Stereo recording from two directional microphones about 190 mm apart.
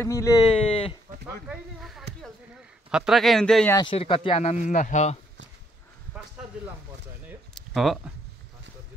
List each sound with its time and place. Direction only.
0.0 s speech: 15° left (ahead or behind)
0.5 s speech: 30° left (ahead or behind)
1.2 s speech: 5° right (ahead or behind)
3.7 s speech: 30° left (ahead or behind)
7.5 s a sound: centre (ahead or behind)